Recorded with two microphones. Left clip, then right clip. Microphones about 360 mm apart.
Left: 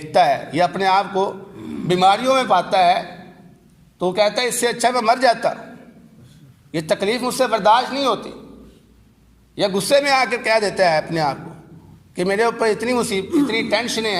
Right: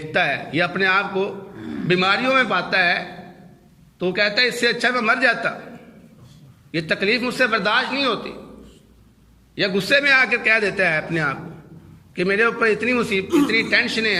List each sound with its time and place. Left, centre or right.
0.1 s a man's voice: centre
6.7 s a man's voice: centre
9.6 s a man's voice: centre